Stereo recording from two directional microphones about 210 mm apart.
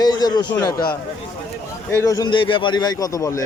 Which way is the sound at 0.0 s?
20° left (ahead or behind).